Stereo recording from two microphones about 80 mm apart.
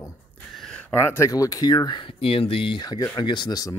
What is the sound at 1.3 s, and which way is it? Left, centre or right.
Speech, left.